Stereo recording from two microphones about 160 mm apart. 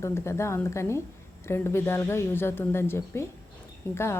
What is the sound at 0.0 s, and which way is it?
A woman's voice, 15° left (ahead or behind).